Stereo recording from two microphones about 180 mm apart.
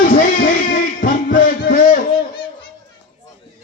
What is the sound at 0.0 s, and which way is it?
Music, 50° left (ahead or behind).